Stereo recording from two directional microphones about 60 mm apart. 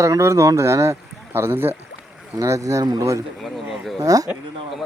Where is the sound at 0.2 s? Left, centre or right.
Right.